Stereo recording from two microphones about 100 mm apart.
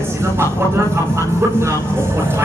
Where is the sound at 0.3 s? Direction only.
25° right (ahead or behind).